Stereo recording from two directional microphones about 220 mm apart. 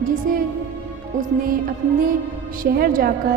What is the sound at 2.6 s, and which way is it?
Speech, 40° right (ahead or behind).